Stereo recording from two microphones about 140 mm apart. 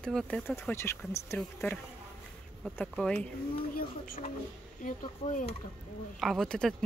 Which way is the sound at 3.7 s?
90° left.